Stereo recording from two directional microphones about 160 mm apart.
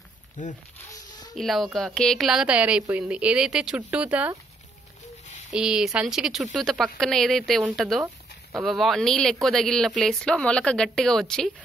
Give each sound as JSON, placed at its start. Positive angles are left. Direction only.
{"t": 0.4, "sound": "speech", "side_deg": 50}
{"t": 1.3, "sound": "a woman's voice", "side_deg": 0}
{"t": 5.5, "sound": "a woman's voice", "side_deg": -5}